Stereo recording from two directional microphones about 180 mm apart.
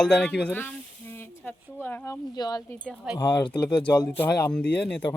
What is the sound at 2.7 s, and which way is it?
Speech, 5° left (ahead or behind).